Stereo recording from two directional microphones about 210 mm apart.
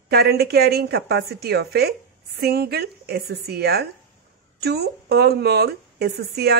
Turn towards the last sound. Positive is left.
turn(degrees=-50)  # may be behind; listen again after turning